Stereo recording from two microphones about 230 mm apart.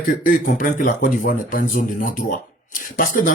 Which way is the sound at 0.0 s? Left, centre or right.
Left.